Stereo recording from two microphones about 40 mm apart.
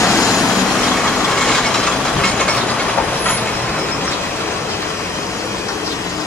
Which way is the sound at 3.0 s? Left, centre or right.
Left.